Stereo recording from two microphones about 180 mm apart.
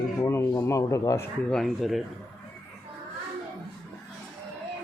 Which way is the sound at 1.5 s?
Centre (ahead or behind).